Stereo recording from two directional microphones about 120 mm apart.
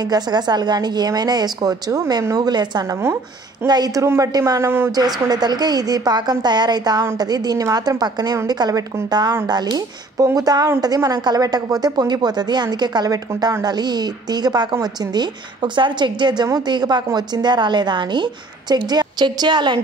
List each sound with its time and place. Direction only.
0.0 s a woman's voice: 35° right (ahead or behind); by 4.9 s 20° right (ahead or behind)
4.9 s a woman's voice: 35° right (ahead or behind)